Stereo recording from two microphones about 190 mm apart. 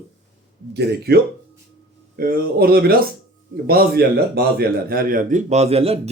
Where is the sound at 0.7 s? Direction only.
55° right (ahead or behind).